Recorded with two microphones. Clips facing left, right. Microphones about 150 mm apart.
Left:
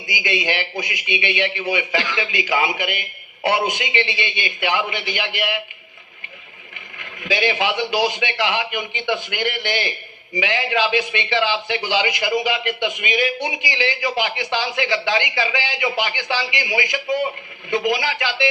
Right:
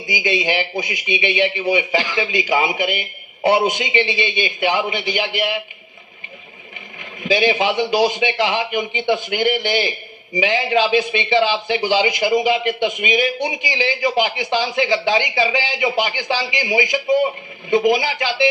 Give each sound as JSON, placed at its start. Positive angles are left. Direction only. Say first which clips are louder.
{"t": 0.2, "sound": "a man's voice", "louder": "right 3 dB", "side_deg": -20}
{"t": 2.0, "sound": "speech", "louder": "right 3 dB", "side_deg": -40}
{"t": 2.2, "sound": "a man's voice", "louder": "right 3 dB", "side_deg": -20}
{"t": 7.0, "sound": "a man's voice", "louder": "right 4 dB", "side_deg": -20}